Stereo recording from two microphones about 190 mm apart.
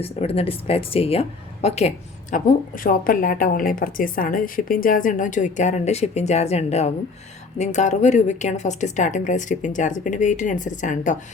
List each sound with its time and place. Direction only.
0.0 s speech: 30° left (ahead or behind)
2.3 s speech: 45° left (ahead or behind)